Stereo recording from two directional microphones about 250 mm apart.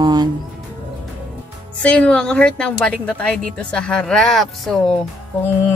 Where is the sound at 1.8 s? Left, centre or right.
Centre.